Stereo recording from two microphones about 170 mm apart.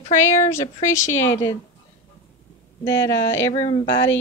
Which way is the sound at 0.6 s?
45° left (ahead or behind).